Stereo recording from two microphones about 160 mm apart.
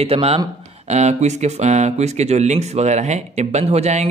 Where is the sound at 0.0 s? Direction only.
40° right (ahead or behind).